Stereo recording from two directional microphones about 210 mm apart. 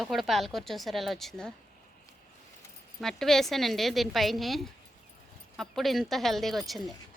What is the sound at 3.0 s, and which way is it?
A woman's voice, centre (ahead or behind).